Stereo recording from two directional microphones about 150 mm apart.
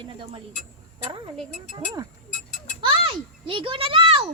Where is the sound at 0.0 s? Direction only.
35° right (ahead or behind).